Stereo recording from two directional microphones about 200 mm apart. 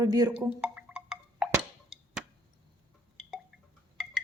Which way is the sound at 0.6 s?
5° right (ahead or behind).